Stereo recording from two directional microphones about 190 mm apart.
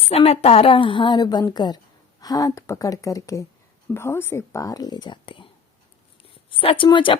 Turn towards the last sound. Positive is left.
turn(degrees=25)  # may be behind; listen again after turning